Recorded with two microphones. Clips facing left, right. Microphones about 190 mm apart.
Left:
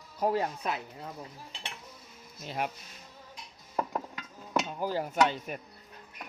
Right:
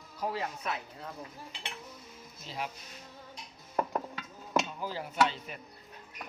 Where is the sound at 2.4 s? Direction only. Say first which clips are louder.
Left 5 dB; 55° left (ahead or behind).